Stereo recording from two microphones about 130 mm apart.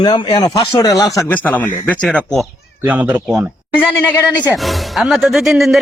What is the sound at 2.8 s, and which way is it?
Speech, 10° right (ahead or behind).